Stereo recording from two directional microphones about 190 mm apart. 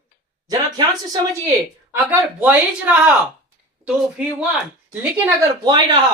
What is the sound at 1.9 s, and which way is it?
A man's voice, 10° right (ahead or behind).